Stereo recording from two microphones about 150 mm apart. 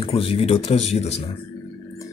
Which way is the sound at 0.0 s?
40° left (ahead or behind).